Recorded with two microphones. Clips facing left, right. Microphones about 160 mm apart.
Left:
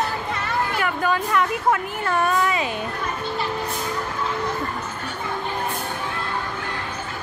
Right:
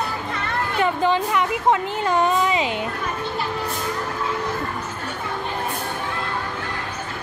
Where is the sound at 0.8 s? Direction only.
25° right (ahead or behind).